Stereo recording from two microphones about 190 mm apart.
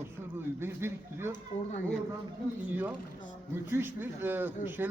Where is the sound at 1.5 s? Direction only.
35° left (ahead or behind).